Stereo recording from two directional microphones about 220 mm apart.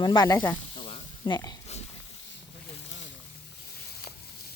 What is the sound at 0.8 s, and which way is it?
Snake, 25° left (ahead or behind).